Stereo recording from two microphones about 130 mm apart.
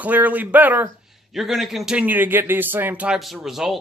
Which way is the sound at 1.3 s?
Centre (ahead or behind).